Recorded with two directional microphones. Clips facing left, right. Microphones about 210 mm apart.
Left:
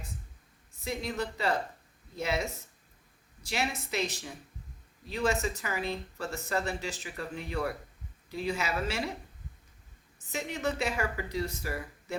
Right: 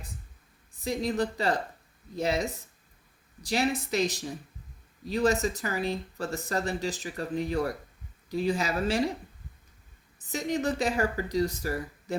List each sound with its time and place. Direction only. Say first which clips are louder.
0.9 s speech: right 6 dB; 35° right (ahead or behind)
3.5 s speech: right 6 dB; 35° right (ahead or behind)
10.3 s speech: right 4 dB; 35° right (ahead or behind)